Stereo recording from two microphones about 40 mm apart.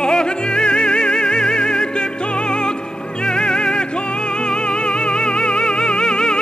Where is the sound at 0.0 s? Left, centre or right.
Left.